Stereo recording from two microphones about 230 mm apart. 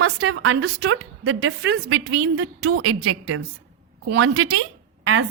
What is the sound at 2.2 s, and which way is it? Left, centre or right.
A woman's voice, right.